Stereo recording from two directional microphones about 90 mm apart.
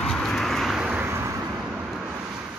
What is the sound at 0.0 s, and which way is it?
Vehicle, 5° left (ahead or behind).